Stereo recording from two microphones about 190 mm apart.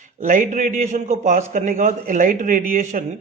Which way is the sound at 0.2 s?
40° right (ahead or behind).